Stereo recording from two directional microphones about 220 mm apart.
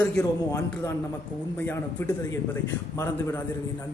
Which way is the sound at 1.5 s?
10° left (ahead or behind).